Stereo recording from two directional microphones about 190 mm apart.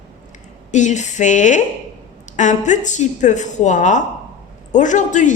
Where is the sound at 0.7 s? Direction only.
40° left (ahead or behind).